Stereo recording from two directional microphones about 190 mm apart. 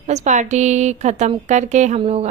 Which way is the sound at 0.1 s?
35° right (ahead or behind).